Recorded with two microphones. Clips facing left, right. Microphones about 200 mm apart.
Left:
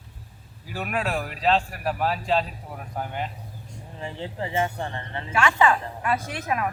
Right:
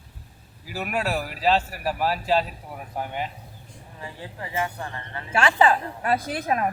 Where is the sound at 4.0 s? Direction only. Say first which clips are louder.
Left 5 dB; 25° left (ahead or behind).